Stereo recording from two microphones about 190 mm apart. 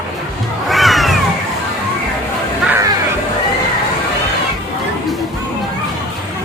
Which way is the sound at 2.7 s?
15° right (ahead or behind).